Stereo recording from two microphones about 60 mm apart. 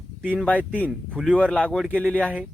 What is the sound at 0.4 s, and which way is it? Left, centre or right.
Speech, left.